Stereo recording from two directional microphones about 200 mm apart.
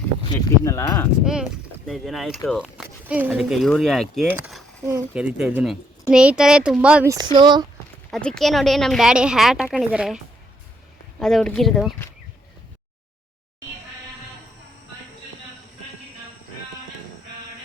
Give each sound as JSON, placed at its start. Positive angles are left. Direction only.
{"t": 0.3, "sound": "speech", "side_deg": 15}
{"t": 1.2, "sound": "speech", "side_deg": -5}
{"t": 7.1, "sound": "speech", "side_deg": -20}
{"t": 8.1, "sound": "speech", "side_deg": 5}
{"t": 11.2, "sound": "speech", "side_deg": 0}